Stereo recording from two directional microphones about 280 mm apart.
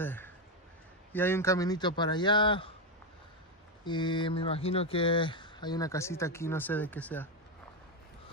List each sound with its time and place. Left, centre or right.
0.0 s speech: centre
3.8 s speech: centre